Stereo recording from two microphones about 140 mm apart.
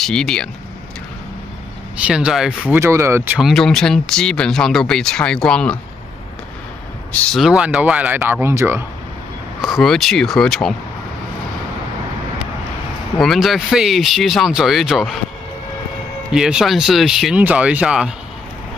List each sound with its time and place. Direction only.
0.0 s speech: 5° left (ahead or behind)
2.0 s speech: 5° right (ahead or behind)
2.8 s speech: 20° right (ahead or behind)
3.3 s speech: centre (ahead or behind)
7.3 s speech: 5° right (ahead or behind)
9.6 s speech: centre (ahead or behind)
13.2 s speech: centre (ahead or behind)
16.3 s speech: 5° right (ahead or behind)